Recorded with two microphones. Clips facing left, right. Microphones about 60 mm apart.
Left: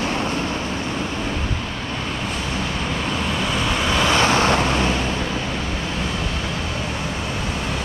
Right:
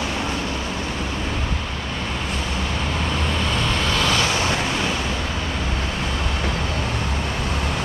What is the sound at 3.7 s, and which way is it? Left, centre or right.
Vehicle, centre.